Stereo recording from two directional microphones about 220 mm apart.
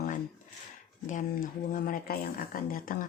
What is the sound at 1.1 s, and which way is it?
Speech, 35° left (ahead or behind).